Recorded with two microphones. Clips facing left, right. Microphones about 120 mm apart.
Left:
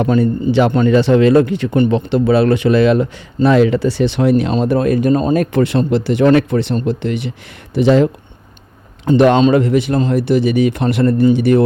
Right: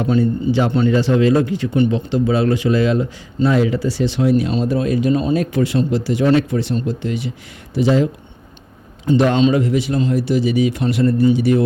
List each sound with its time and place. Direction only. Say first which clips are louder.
0.0 s speech: left 3 dB; 55° left (ahead or behind)